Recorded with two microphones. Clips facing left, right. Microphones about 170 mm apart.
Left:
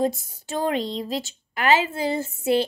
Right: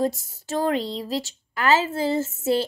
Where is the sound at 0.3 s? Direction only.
20° left (ahead or behind).